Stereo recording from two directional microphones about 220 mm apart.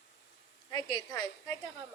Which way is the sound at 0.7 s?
20° left (ahead or behind).